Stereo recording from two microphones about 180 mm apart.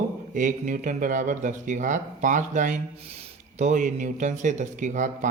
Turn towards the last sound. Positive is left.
turn(degrees=-45)  # may be behind; listen again after turning